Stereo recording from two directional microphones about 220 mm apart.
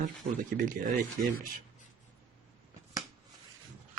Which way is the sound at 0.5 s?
40° right (ahead or behind).